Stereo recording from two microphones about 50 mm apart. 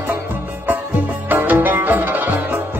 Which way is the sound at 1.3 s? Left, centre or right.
Right.